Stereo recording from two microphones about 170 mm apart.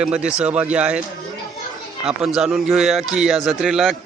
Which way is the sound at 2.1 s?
Centre (ahead or behind).